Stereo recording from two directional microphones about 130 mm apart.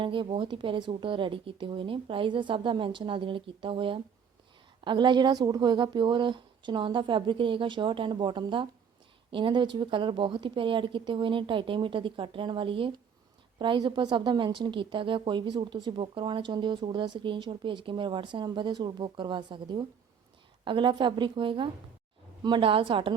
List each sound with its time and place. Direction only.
0.0 s a woman's voice: 40° right (ahead or behind)